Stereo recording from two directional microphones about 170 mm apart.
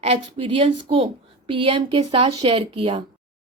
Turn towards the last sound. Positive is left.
turn(degrees=-30)  # may be behind; listen again after turning